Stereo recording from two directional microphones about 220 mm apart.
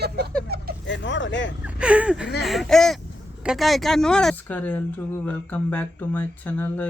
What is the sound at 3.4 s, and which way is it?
Speech, centre (ahead or behind).